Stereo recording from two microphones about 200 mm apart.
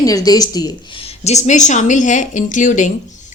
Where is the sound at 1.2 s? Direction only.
35° left (ahead or behind).